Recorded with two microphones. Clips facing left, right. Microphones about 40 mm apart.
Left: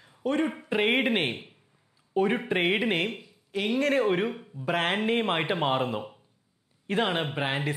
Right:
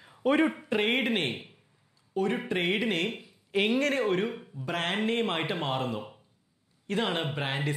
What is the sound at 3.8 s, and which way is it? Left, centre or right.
A man's voice, centre.